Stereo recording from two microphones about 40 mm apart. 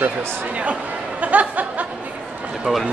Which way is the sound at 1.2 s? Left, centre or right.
Right.